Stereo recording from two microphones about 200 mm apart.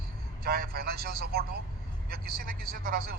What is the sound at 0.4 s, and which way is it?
A man's voice, 50° right (ahead or behind).